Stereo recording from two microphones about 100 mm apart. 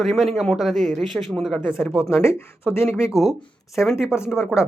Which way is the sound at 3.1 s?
Centre (ahead or behind).